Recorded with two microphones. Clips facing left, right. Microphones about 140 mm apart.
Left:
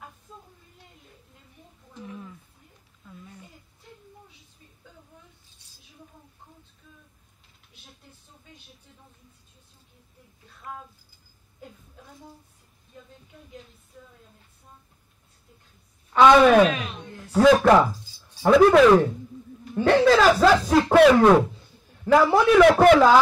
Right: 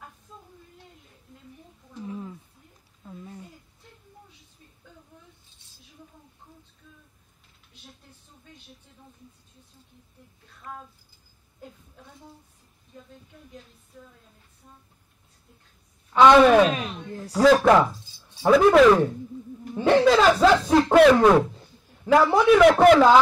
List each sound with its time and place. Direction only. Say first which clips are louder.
2.0 s roaring cats: right 5 dB; 30° right (ahead or behind)
3.0 s a sound: right 5 dB; 30° right (ahead or behind)
16.1 s speech: even; centre (ahead or behind)
16.7 s speech: right 2 dB; 35° right (ahead or behind)
17.5 s speech: even; 5° left (ahead or behind)
17.9 s music: left 2 dB; 25° right (ahead or behind)
18.4 s speech: even; centre (ahead or behind)